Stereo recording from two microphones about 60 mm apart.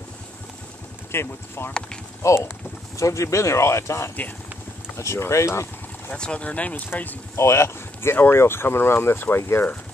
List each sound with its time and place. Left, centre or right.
1.1 s speech: left
1.7 s speech: centre
2.2 s speech: left
6.1 s speech: centre
7.3 s speech: left